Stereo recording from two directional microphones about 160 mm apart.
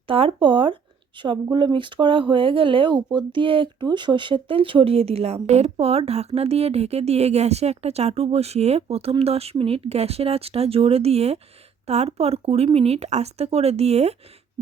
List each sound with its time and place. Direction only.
0.1 s speech: 35° right (ahead or behind)